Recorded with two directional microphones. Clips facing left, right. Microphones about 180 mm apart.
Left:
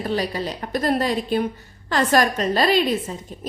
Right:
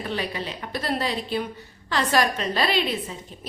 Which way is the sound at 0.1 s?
40° left (ahead or behind).